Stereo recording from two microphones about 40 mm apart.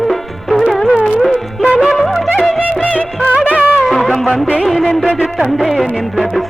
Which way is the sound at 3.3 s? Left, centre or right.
Right.